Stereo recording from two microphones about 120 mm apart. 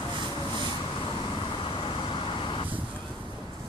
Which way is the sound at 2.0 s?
45° left (ahead or behind).